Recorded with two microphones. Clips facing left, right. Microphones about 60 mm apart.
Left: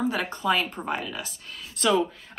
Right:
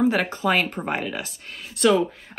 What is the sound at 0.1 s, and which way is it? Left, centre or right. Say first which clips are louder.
A woman's voice: right 3 dB; right.